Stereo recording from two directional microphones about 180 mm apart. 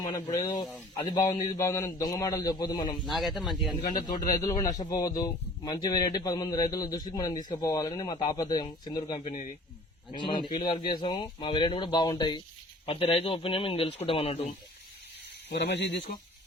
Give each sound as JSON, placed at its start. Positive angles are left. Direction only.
{"t": 0.2, "sound": "speech", "side_deg": 20}
{"t": 3.1, "sound": "speech", "side_deg": 0}
{"t": 3.8, "sound": "speech", "side_deg": 25}
{"t": 9.2, "sound": "speech", "side_deg": 45}
{"t": 10.2, "sound": "speech", "side_deg": 25}
{"t": 15.4, "sound": "speech", "side_deg": 70}